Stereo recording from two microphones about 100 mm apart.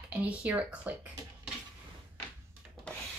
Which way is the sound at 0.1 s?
15° right (ahead or behind).